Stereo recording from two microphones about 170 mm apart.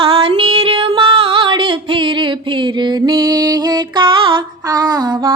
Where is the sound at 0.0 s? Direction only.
30° right (ahead or behind).